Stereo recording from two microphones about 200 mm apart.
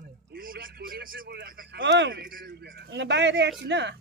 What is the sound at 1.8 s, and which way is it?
Speech, 65° right (ahead or behind).